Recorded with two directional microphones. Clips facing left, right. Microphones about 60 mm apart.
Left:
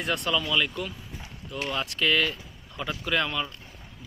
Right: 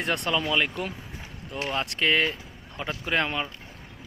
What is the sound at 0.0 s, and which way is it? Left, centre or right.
Speech, right.